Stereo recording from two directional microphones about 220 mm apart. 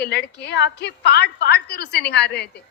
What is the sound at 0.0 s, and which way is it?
A woman's voice, 50° left (ahead or behind).